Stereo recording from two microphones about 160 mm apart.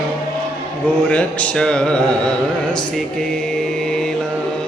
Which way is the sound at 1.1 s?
10° left (ahead or behind).